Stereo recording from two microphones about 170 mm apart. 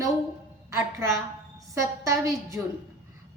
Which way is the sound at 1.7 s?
20° right (ahead or behind).